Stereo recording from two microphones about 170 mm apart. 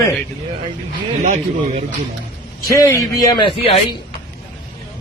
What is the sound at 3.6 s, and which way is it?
Speech, 35° left (ahead or behind).